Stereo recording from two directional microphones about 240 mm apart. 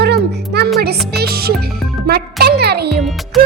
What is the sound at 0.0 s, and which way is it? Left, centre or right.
Music, right.